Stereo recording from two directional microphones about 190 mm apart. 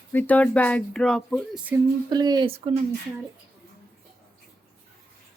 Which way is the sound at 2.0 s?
20° right (ahead or behind).